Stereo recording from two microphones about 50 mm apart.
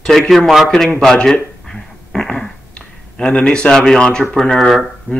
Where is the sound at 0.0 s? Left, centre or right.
Centre.